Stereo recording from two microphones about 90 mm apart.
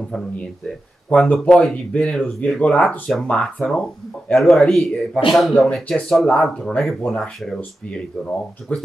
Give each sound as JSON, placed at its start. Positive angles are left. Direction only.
{"t": 0.7, "sound": "speech", "side_deg": 10}
{"t": 8.7, "sound": "speech", "side_deg": 15}